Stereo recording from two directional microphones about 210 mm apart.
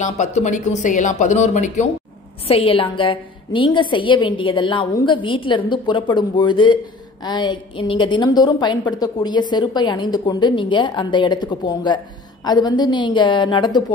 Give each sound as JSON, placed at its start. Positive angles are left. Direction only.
{"t": 0.0, "sound": "a woman's voice", "side_deg": 35}